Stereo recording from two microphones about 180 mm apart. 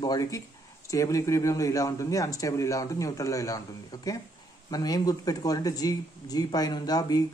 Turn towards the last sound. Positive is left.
turn(degrees=20)  # may be behind; listen again after turning